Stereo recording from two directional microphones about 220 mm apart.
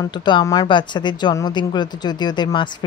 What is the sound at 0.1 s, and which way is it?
A woman's voice, 20° left (ahead or behind).